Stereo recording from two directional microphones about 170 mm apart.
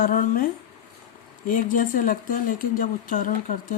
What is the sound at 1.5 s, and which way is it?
Speech, 55° left (ahead or behind).